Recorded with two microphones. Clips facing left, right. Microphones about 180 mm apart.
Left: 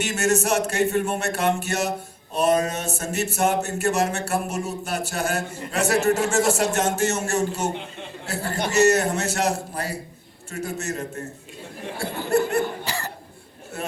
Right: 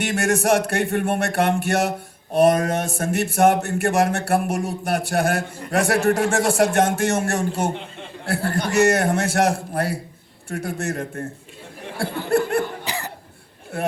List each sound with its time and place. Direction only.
0.0 s speech: 55° right (ahead or behind)
12.3 s chuckle: 55° right (ahead or behind)
12.8 s cough: 15° right (ahead or behind)